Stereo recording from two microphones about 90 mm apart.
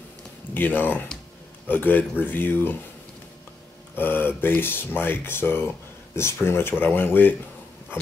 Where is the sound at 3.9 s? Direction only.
25° left (ahead or behind).